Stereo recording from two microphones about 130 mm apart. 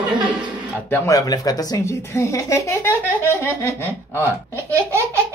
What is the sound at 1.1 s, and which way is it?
Speech, 30° left (ahead or behind).